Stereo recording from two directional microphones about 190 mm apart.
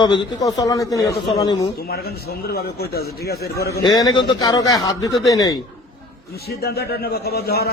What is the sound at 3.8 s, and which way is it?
A man's voice, 20° left (ahead or behind).